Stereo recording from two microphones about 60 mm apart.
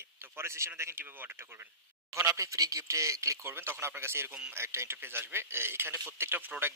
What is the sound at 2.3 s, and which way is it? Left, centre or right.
Speech, right.